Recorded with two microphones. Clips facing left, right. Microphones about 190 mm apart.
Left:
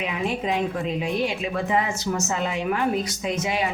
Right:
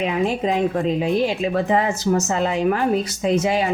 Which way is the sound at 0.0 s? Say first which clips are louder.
Right 6 dB; 35° right (ahead or behind).